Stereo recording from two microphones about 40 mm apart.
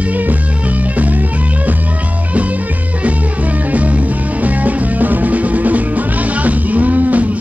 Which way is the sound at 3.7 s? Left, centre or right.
Right.